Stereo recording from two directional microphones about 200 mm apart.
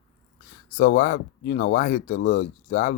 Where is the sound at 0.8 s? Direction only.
45° left (ahead or behind).